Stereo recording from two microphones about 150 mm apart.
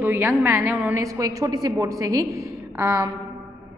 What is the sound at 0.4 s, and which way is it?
A woman's voice, 15° right (ahead or behind).